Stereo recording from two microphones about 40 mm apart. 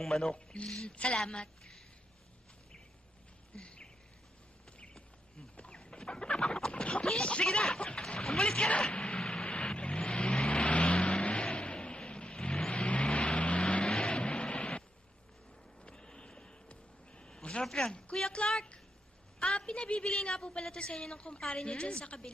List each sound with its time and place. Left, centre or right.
0.0 s speech: centre
0.3 s a woman's voice: left
3.5 s a sound: left
5.5 s a sound: left
7.0 s speech: centre
7.8 s a woman's voice: left
8.9 s vehicle: left
15.8 s a sound: left
17.7 s a woman's voice: centre; by 22.2 s left